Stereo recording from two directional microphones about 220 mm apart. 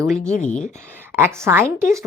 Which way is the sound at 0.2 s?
35° left (ahead or behind).